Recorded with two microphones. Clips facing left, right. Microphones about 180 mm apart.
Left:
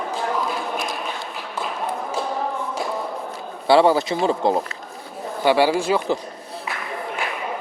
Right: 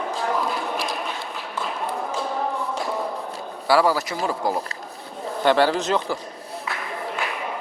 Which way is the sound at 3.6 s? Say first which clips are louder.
Left 4 dB; 25° left (ahead or behind).